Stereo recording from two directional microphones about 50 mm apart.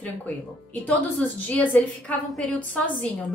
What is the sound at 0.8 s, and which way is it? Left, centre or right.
A woman's voice, left.